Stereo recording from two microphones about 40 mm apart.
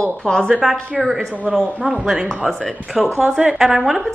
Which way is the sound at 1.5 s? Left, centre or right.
Centre.